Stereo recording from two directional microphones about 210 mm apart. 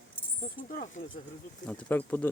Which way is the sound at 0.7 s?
45° left (ahead or behind).